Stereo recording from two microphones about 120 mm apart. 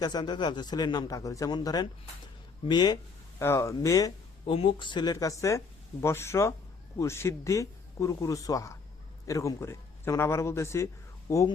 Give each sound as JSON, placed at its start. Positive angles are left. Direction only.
{"t": 0.0, "sound": "a man's voice", "side_deg": 35}
{"t": 3.3, "sound": "speech", "side_deg": 20}
{"t": 4.4, "sound": "speech", "side_deg": 45}